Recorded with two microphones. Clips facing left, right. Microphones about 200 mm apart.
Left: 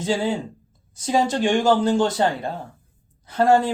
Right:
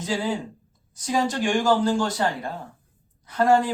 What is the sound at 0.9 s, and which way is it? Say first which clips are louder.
Speech: left 3 dB; 25° left (ahead or behind).